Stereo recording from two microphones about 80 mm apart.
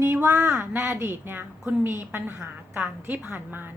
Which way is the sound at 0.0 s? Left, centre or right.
Right.